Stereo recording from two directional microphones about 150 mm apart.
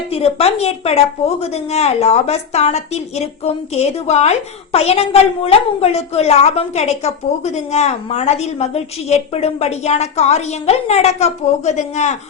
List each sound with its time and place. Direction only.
0.1 s a woman's voice: 40° left (ahead or behind)